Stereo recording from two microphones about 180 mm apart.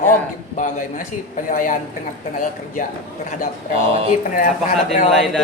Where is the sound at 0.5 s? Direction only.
45° left (ahead or behind).